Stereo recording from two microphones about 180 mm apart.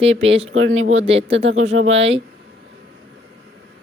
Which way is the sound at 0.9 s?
35° right (ahead or behind).